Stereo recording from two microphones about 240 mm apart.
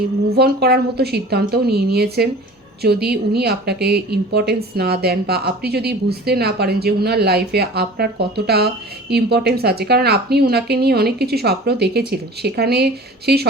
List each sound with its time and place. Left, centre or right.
0.3 s a woman's voice: right